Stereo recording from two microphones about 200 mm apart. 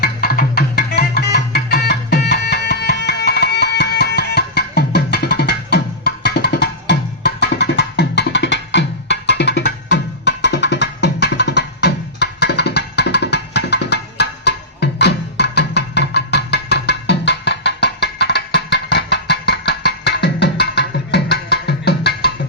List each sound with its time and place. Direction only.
0.0 s music: 50° left (ahead or behind)